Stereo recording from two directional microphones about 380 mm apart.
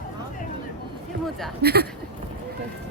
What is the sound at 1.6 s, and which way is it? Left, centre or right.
Speech, right.